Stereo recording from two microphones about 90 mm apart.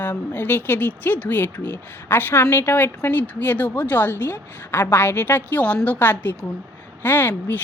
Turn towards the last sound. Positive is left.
turn(degrees=20)  # may be behind; listen again after turning